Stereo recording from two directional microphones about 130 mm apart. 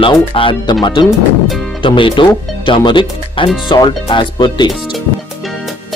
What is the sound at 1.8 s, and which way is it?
Speech, 40° left (ahead or behind).